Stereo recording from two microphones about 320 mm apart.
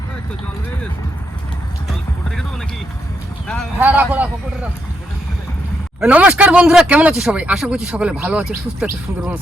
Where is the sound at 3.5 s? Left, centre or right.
Centre.